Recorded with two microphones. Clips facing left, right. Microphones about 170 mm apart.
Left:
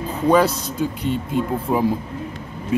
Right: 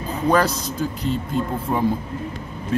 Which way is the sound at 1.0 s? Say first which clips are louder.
Even; 5° left (ahead or behind).